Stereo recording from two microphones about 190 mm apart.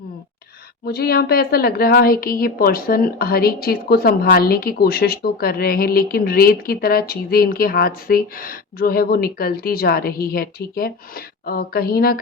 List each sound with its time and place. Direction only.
0.9 s a woman's voice: 55° left (ahead or behind)